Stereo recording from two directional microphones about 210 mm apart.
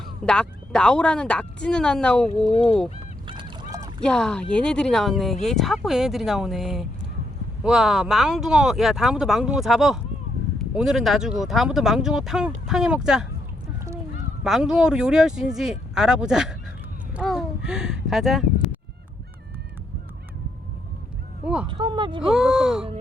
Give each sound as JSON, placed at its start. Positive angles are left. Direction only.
{"t": 0.3, "sound": "speech", "side_deg": 5}
{"t": 2.5, "sound": "speech", "side_deg": 30}
{"t": 3.2, "sound": "goose", "side_deg": -25}
{"t": 4.0, "sound": "speech", "side_deg": 5}
{"t": 14.4, "sound": "a child's voice", "side_deg": 0}
{"t": 21.4, "sound": "speech", "side_deg": -5}
{"t": 21.7, "sound": "speech", "side_deg": -20}
{"t": 22.3, "sound": "speech", "side_deg": -5}